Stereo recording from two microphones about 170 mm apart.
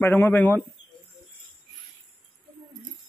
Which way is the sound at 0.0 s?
10° left (ahead or behind).